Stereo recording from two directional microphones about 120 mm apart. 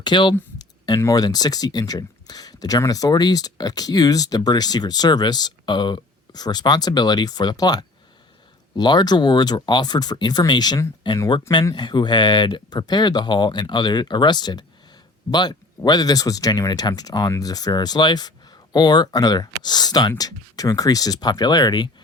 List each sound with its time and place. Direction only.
0.0 s speech: 40° left (ahead or behind)